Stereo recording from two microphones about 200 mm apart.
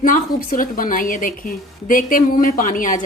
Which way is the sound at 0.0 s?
40° left (ahead or behind).